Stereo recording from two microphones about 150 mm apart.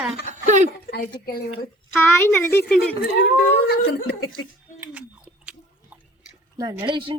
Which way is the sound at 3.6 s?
90° left.